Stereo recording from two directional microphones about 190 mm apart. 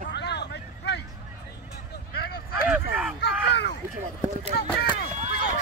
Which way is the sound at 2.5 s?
5° right (ahead or behind).